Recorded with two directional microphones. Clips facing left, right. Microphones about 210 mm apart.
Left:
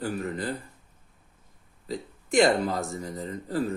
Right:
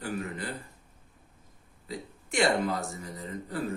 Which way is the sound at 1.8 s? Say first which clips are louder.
Left 5 dB; 40° left (ahead or behind).